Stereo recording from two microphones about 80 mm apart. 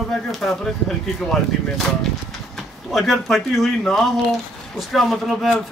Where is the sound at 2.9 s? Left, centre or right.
Centre.